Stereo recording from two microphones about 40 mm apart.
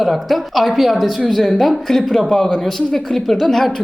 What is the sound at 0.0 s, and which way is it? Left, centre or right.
A woman's voice, centre.